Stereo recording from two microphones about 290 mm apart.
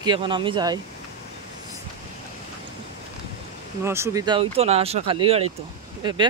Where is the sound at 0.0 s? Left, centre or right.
Centre.